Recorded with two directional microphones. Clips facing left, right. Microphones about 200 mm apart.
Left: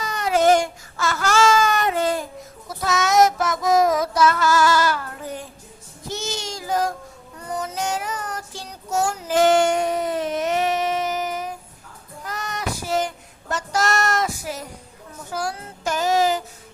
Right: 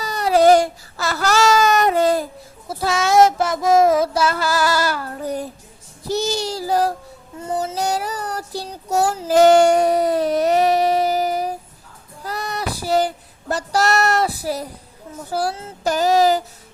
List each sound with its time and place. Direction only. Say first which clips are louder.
0.0 s baby cry: right 4 dB; 35° right (ahead or behind)
2.6 s child singing: right 3 dB; 30° right (ahead or behind)